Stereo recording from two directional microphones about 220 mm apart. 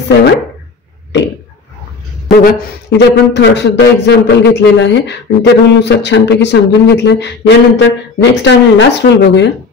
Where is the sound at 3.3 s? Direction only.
50° left (ahead or behind).